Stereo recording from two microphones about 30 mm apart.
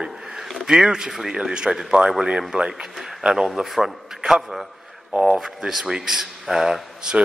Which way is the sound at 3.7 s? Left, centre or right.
Centre.